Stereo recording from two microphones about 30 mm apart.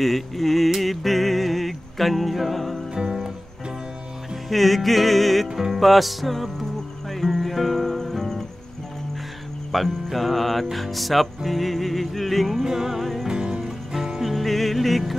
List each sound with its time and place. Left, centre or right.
0.0 s music: centre
2.9 s music: right
4.5 s music: centre
9.7 s music: centre
12.6 s music: centre
13.3 s music: right
13.7 s music: centre
14.2 s music: centre